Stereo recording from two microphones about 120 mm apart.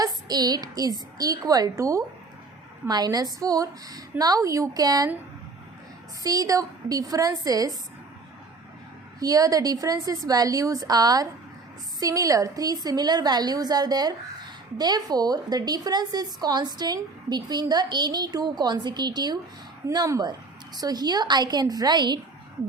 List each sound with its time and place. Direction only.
0.0 s a woman's voice: 35° right (ahead or behind)
6.2 s a woman's voice: 30° right (ahead or behind)
9.2 s a woman's voice: 30° right (ahead or behind)